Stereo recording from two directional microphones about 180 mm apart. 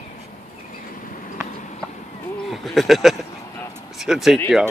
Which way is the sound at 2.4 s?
Centre (ahead or behind).